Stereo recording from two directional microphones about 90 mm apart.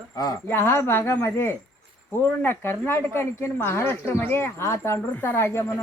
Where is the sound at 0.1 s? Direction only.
40° left (ahead or behind).